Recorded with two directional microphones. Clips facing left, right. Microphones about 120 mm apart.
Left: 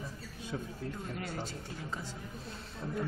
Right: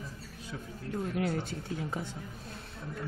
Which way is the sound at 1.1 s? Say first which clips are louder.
Right 8 dB; 65° right (ahead or behind).